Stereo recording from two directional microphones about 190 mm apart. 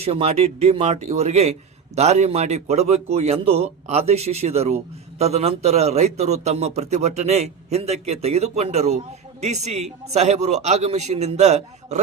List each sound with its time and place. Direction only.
0.0 s a man's voice: 30° right (ahead or behind)